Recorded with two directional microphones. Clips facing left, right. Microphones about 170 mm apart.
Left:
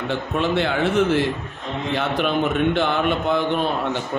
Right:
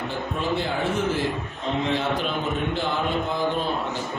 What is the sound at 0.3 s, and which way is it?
A man's voice, 70° left (ahead or behind).